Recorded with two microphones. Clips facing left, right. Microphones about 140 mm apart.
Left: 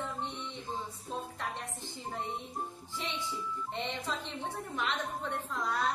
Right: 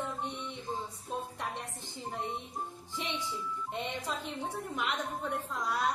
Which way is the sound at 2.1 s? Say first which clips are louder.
Even; 15° right (ahead or behind).